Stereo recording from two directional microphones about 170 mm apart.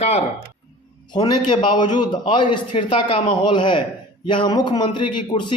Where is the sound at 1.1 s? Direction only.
25° left (ahead or behind).